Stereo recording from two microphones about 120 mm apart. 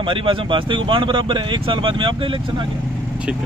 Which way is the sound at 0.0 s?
45° right (ahead or behind).